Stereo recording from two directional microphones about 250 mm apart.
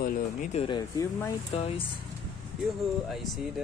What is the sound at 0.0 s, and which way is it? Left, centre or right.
Speech, left.